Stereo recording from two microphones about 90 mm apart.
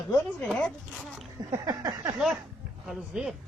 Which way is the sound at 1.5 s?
40° right (ahead or behind).